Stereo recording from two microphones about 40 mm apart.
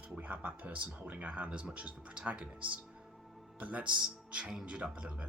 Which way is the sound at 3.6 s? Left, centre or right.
Right.